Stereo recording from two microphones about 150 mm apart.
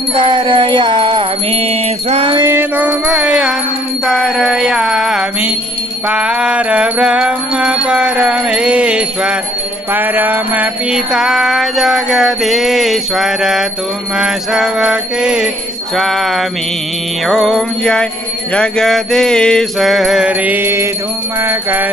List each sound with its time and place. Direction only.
0.1 s music: 30° right (ahead or behind)
2.4 s music: 10° right (ahead or behind)
9.9 s mantra: 10° right (ahead or behind)
21.5 s music: 15° right (ahead or behind)